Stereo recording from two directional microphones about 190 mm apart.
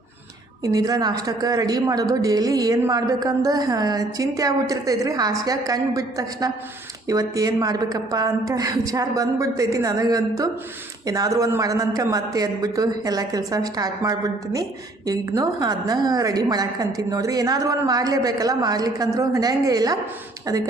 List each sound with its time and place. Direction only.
0.6 s a woman's voice: 20° right (ahead or behind)